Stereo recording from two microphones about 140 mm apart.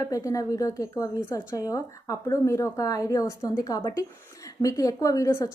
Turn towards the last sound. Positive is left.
turn(degrees=20)  # may be behind; listen again after turning